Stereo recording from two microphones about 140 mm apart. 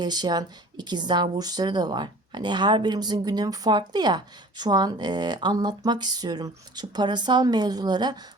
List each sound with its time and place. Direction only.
0.0 s speech: 30° right (ahead or behind)